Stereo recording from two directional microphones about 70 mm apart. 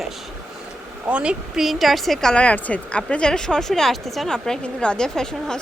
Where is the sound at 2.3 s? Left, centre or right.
Centre.